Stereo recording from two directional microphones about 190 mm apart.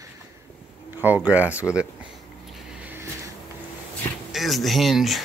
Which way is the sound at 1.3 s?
10° right (ahead or behind).